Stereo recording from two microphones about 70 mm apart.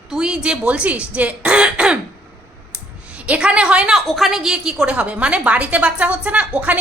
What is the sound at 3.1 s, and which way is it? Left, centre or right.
Speech, centre.